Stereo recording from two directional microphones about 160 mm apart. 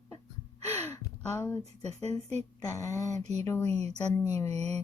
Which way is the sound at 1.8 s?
40° right (ahead or behind).